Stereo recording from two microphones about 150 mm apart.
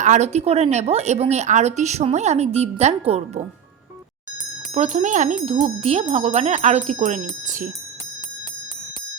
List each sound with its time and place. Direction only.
0.0 s speech: 50° right (ahead or behind)
4.7 s speech: 45° right (ahead or behind)
5.5 s speech: 40° right (ahead or behind); by 7.7 s 60° right (ahead or behind)